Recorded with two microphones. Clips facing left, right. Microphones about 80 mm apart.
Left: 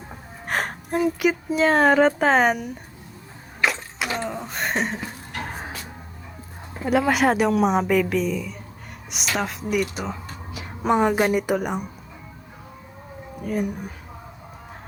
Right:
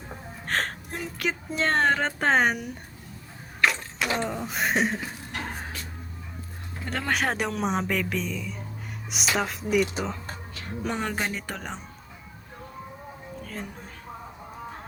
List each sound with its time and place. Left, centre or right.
0.4 s speech: centre
3.6 s a sound: centre
6.8 s a woman's voice: centre
10.5 s speech: centre
13.4 s speech: centre